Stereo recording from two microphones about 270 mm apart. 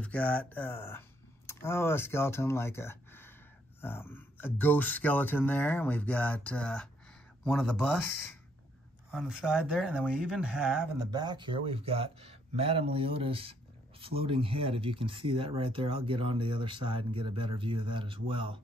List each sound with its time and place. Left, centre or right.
0.0 s speech: centre
9.1 s speech: centre